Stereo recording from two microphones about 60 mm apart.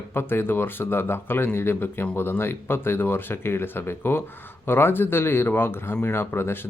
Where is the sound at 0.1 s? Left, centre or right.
Left.